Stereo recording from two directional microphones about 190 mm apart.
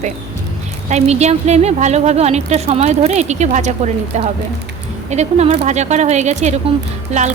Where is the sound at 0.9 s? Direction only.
35° right (ahead or behind).